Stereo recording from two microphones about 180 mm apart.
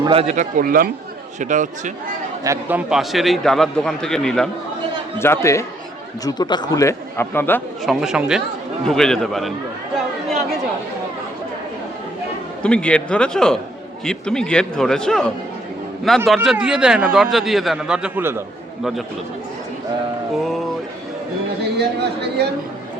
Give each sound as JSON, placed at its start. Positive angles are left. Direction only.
{"t": 0.0, "sound": "a man's voice", "side_deg": -30}
{"t": 2.4, "sound": "a man's voice", "side_deg": -15}
{"t": 5.2, "sound": "a man's voice", "side_deg": 15}
{"t": 7.9, "sound": "a man's voice", "side_deg": -5}
{"t": 12.6, "sound": "a man's voice", "side_deg": 5}
{"t": 20.4, "sound": "a man's voice", "side_deg": 0}
{"t": 21.6, "sound": "a man's voice", "side_deg": -65}